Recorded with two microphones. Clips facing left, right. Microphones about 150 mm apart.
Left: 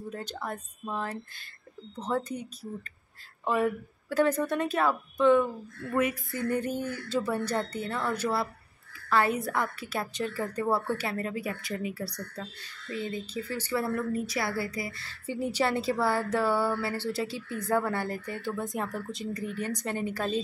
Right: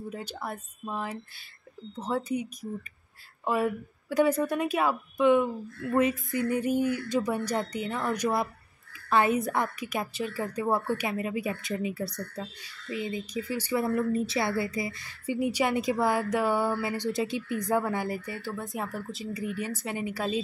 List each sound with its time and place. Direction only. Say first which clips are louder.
0.1 s a woman's voice: even; 10° right (ahead or behind)